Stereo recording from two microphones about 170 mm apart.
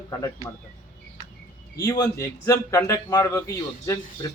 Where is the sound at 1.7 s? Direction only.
20° left (ahead or behind).